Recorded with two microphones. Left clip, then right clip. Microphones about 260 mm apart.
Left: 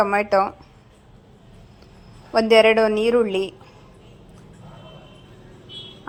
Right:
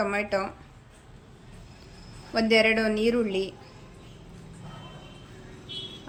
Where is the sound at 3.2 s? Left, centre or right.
Centre.